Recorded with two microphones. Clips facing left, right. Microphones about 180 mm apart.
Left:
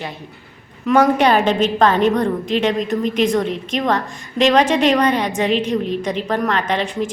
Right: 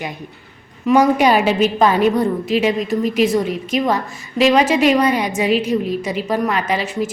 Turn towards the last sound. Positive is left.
turn(degrees=-5)  # may be behind; listen again after turning